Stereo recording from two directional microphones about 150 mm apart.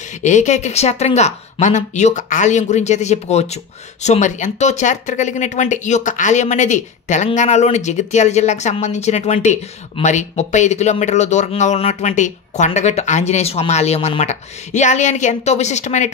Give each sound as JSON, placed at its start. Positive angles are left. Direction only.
{"t": 0.2, "sound": "speech", "side_deg": 50}